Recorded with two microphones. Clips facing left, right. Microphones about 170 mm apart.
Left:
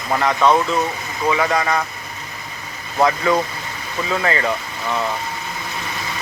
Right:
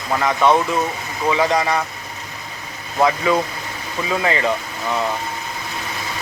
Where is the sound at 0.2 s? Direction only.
5° right (ahead or behind).